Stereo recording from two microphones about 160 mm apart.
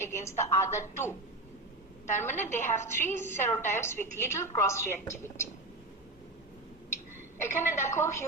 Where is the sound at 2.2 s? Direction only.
15° left (ahead or behind).